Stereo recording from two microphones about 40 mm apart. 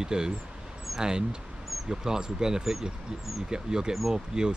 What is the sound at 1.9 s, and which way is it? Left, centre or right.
Speech, centre.